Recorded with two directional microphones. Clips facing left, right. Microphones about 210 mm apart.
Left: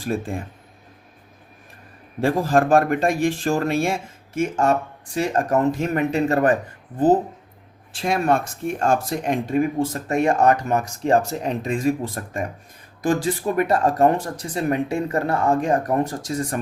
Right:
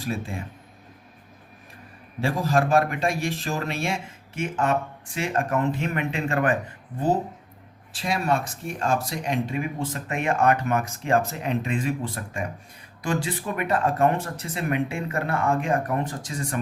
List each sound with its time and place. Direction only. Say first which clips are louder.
0.0 s speech: left 5 dB; 50° left (ahead or behind)
2.2 s speech: left 5 dB; 50° left (ahead or behind)
7.9 s speech: left 5 dB; 50° left (ahead or behind)